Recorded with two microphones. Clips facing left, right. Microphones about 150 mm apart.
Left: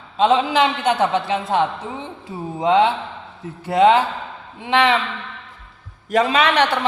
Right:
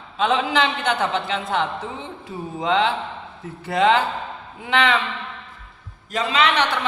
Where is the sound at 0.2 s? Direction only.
20° left (ahead or behind).